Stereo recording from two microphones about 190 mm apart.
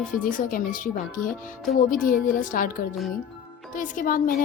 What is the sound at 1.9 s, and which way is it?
Speech, 45° left (ahead or behind).